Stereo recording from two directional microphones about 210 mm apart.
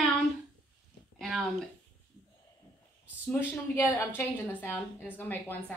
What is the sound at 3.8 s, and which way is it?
A woman's voice, 10° left (ahead or behind).